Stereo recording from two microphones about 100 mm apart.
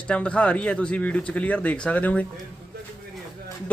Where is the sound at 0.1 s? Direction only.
10° left (ahead or behind).